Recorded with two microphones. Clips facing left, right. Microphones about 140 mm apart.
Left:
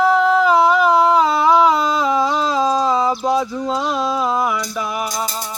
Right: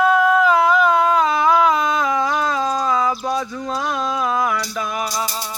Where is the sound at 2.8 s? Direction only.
30° left (ahead or behind).